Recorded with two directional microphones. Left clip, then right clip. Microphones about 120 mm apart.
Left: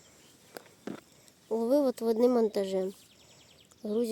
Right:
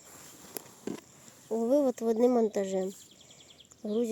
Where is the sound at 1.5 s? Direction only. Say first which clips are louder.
Even; 25° left (ahead or behind).